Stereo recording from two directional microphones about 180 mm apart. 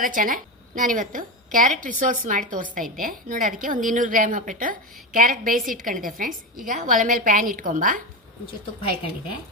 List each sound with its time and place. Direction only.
0.0 s a woman's voice: 50° right (ahead or behind)